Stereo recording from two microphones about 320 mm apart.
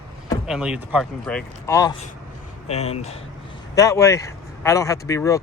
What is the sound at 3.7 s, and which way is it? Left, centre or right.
Speech, centre.